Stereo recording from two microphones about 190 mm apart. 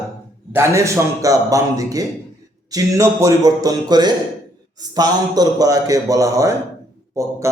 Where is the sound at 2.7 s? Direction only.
20° right (ahead or behind).